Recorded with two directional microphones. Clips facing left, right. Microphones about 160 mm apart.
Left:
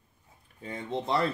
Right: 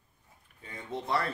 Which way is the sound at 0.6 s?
30° left (ahead or behind).